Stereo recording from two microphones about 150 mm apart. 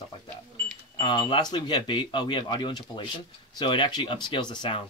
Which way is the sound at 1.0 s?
30° left (ahead or behind).